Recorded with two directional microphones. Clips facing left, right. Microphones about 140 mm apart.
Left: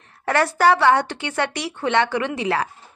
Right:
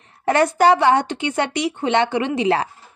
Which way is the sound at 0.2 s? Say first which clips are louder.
Right 3 dB; 20° right (ahead or behind).